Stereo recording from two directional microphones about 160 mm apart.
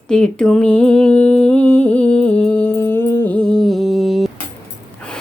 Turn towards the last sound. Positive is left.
turn(degrees=0)  # may be behind; listen again after turning